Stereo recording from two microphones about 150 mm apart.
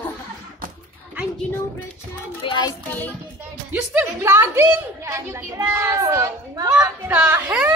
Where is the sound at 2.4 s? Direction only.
30° left (ahead or behind).